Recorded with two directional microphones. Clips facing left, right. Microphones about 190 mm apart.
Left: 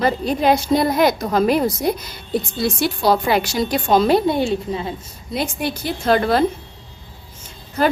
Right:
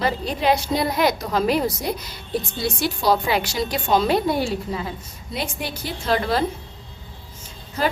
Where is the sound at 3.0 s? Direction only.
50° left (ahead or behind).